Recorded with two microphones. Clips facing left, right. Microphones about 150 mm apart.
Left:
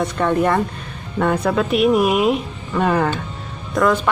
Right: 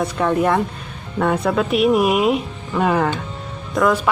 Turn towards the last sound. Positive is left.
turn(degrees=0)  # may be behind; listen again after turning